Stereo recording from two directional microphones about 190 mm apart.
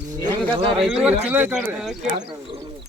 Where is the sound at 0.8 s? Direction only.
5° right (ahead or behind).